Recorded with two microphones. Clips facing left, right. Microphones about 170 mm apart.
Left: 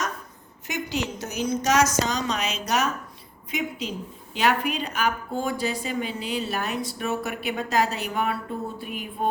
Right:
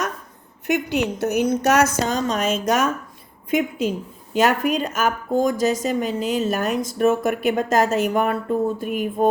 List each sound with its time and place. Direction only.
0.7 s a woman's voice: 60° right (ahead or behind)